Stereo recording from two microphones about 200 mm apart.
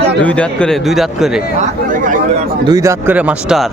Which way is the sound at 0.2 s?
5° left (ahead or behind).